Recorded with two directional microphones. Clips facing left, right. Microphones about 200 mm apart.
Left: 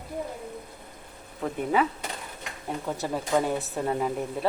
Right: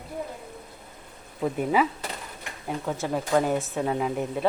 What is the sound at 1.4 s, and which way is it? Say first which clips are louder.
Speech: right 4 dB; 10° right (ahead or behind).